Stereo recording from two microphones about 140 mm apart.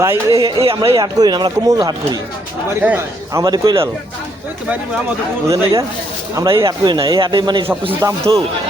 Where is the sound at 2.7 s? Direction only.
15° right (ahead or behind).